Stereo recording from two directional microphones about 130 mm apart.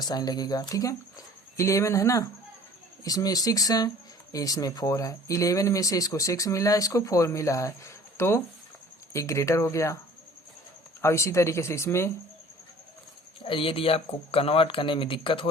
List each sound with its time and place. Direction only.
0.0 s speech: 30° left (ahead or behind)
11.0 s speech: 20° left (ahead or behind)
13.4 s speech: 45° left (ahead or behind)